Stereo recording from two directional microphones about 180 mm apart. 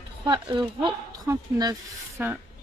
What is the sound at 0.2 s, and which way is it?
Speech, 25° right (ahead or behind).